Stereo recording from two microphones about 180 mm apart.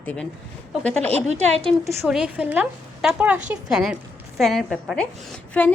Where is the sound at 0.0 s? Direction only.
10° left (ahead or behind).